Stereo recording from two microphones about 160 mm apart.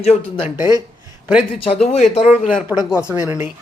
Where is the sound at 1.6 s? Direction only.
40° left (ahead or behind).